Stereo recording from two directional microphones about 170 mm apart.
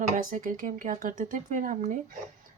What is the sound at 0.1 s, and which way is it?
Speech, 50° right (ahead or behind).